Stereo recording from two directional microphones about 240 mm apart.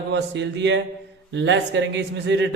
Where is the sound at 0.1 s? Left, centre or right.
Right.